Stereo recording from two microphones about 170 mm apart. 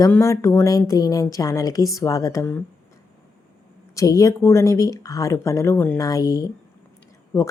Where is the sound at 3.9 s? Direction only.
20° left (ahead or behind).